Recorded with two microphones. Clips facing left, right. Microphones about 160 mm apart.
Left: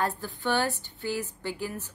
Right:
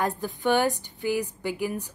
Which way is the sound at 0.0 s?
15° right (ahead or behind).